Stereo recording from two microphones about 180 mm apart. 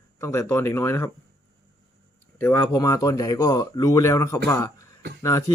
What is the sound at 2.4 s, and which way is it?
Speech, 15° left (ahead or behind).